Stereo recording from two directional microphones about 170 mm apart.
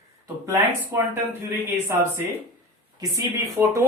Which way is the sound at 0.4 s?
15° right (ahead or behind).